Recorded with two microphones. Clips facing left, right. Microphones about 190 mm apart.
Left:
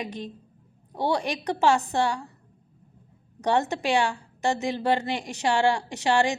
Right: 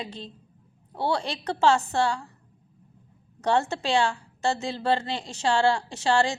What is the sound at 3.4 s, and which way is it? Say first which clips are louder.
A woman's voice: even; 15° left (ahead or behind).